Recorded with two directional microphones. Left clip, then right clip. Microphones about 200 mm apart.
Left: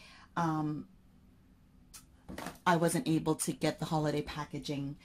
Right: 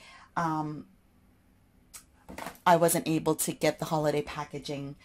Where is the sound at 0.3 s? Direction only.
25° right (ahead or behind).